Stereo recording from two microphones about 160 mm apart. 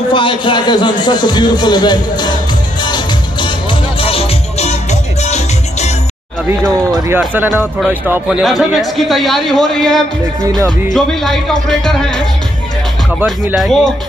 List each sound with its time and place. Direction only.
0.1 s a man's voice: 30° left (ahead or behind)
2.8 s music: 30° left (ahead or behind); by 5.9 s 45° left (ahead or behind)
7.1 s a man's voice: 10° right (ahead or behind); by 12.2 s 5° left (ahead or behind)
13.6 s a man's voice: centre (ahead or behind)